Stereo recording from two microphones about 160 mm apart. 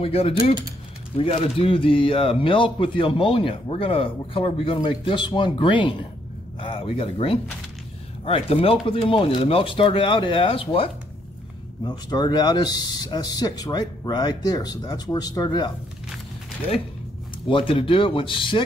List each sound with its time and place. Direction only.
0.0 s speech: 35° left (ahead or behind)
17.5 s speech: 30° left (ahead or behind)